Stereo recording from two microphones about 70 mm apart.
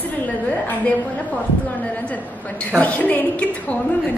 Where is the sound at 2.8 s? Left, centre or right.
Left.